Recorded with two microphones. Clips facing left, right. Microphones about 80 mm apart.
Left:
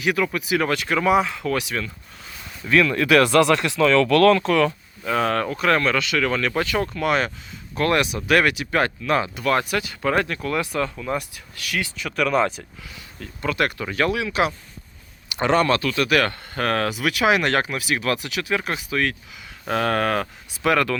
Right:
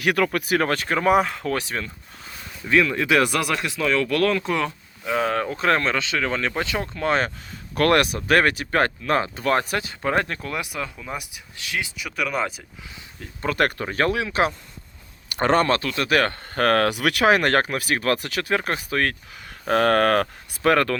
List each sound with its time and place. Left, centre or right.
0.0 s speech: right
2.6 s speech: right
5.5 s speech: right
7.8 s speech: right
8.3 s speech: right
10.6 s speech: centre
11.5 s speech: right
11.9 s speech: centre
13.4 s speech: right
16.6 s speech: right